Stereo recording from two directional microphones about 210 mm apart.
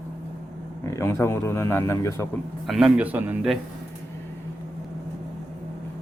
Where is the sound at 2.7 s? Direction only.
5° right (ahead or behind).